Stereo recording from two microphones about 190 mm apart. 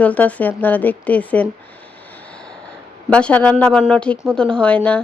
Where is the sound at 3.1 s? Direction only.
5° left (ahead or behind).